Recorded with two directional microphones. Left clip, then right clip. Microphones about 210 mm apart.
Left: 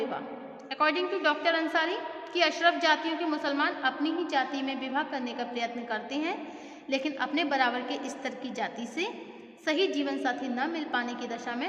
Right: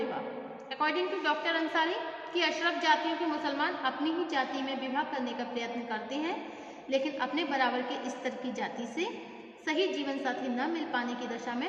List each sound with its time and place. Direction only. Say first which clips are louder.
0.8 s a woman's voice: left 4 dB; 55° left (ahead or behind)